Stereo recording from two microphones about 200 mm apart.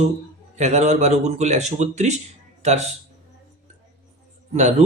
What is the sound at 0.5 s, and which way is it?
Speech, 35° right (ahead or behind).